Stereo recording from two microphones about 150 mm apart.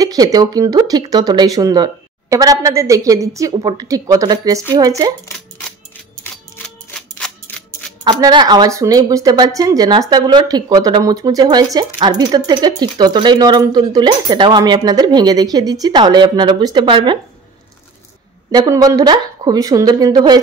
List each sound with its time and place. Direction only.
0.0 s speech: 25° right (ahead or behind)
6.3 s typewriter: 5° left (ahead or behind)
8.0 s speech: 30° right (ahead or behind)
18.5 s speech: 25° right (ahead or behind)